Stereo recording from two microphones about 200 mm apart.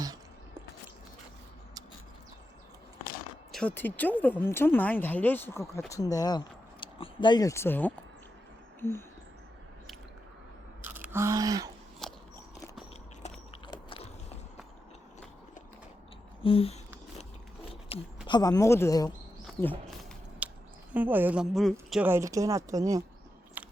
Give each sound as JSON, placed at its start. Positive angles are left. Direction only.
{"t": 3.5, "sound": "speech", "side_deg": 5}
{"t": 8.8, "sound": "a sound", "side_deg": 10}
{"t": 10.8, "sound": "speech", "side_deg": -10}
{"t": 12.0, "sound": "biting", "side_deg": 0}
{"t": 13.7, "sound": "biting", "side_deg": 30}
{"t": 16.4, "sound": "speech", "side_deg": 30}
{"t": 17.9, "sound": "speech", "side_deg": 30}
{"t": 20.4, "sound": "a sound", "side_deg": -5}
{"t": 20.9, "sound": "a woman's voice", "side_deg": -10}
{"t": 23.6, "sound": "a sound", "side_deg": -10}